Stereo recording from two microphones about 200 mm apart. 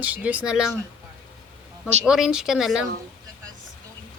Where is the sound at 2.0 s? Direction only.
5° right (ahead or behind).